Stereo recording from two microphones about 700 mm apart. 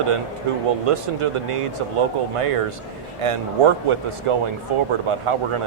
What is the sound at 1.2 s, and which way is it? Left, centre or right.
Speech, right.